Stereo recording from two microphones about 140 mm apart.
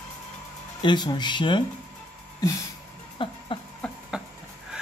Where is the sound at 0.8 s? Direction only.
30° left (ahead or behind).